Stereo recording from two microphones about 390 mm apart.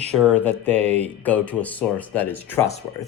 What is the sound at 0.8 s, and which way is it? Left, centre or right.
Mantra, centre.